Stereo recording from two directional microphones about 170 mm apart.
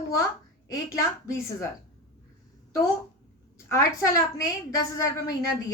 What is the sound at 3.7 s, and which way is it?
A woman's voice, 15° left (ahead or behind).